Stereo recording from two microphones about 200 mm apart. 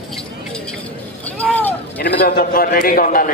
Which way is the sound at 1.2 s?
5° left (ahead or behind).